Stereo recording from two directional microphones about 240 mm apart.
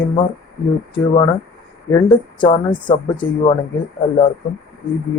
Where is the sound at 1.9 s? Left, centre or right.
Centre.